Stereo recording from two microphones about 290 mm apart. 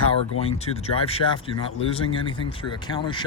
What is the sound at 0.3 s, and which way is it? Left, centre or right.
Speech, left.